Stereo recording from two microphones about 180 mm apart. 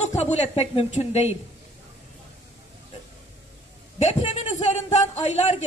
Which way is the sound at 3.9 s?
35° left (ahead or behind).